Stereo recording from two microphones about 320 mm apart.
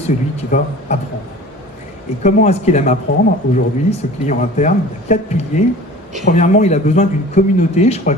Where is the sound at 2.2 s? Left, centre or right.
Centre.